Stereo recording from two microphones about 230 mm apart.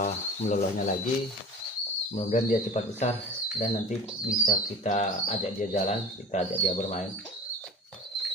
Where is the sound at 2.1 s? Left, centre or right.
Left.